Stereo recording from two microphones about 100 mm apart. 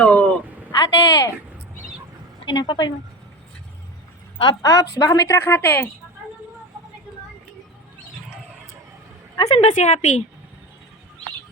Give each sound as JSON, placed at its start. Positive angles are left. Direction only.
{"t": 0.0, "sound": "a sound", "side_deg": 10}
{"t": 0.7, "sound": "speech", "side_deg": 35}
{"t": 2.4, "sound": "speech", "side_deg": 50}
{"t": 4.6, "sound": "a woman's voice", "side_deg": 35}
{"t": 9.5, "sound": "a woman's voice", "side_deg": 90}